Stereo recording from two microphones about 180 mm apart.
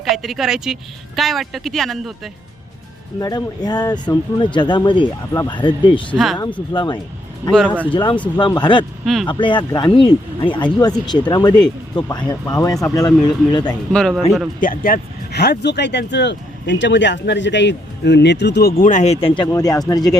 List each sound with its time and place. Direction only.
0.0 s speech: centre (ahead or behind)
3.2 s speech: 20° left (ahead or behind)
6.1 s speech: centre (ahead or behind)
6.7 s speech: 25° left (ahead or behind)
7.5 s speech: 5° left (ahead or behind)
7.9 s speech: 25° left (ahead or behind)
13.9 s speech: 5° left (ahead or behind)
14.6 s speech: 50° left (ahead or behind); by 20.1 s 20° left (ahead or behind)